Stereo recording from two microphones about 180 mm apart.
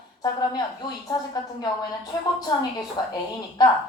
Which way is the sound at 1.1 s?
20° left (ahead or behind).